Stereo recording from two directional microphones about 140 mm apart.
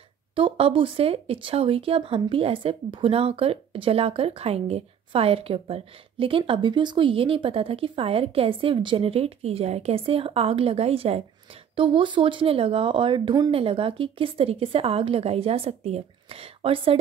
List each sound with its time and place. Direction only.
0.4 s speech: 40° right (ahead or behind)